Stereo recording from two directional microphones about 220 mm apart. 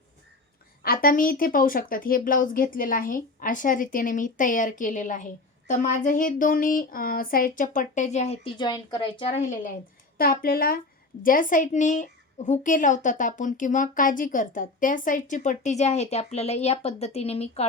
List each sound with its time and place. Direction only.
0.8 s speech: 40° left (ahead or behind)
10.2 s a woman's voice: 40° left (ahead or behind)